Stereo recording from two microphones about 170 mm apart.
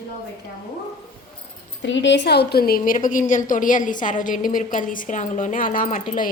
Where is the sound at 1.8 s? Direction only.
90° left.